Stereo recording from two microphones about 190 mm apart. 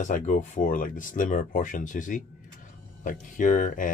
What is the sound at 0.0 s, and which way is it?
Speech, 40° left (ahead or behind).